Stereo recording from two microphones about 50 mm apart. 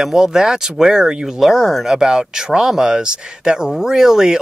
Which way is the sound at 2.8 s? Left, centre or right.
Centre.